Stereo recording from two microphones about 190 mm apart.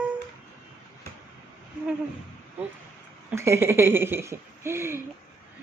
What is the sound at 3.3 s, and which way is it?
Speech, 15° right (ahead or behind).